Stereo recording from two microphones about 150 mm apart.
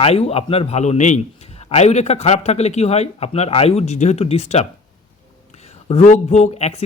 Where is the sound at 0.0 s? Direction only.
45° left (ahead or behind).